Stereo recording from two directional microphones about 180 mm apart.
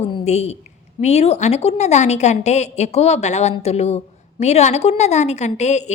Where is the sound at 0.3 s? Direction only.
35° left (ahead or behind).